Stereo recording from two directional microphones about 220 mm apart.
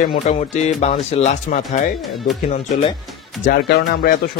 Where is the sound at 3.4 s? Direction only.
45° left (ahead or behind).